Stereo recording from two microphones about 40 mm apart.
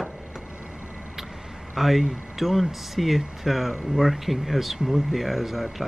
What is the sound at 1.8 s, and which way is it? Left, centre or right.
Speech, centre.